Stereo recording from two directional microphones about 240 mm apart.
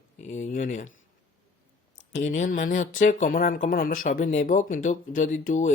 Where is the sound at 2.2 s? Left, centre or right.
Left.